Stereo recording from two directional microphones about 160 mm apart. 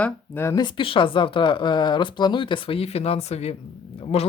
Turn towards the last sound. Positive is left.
turn(degrees=40)  # may be behind; listen again after turning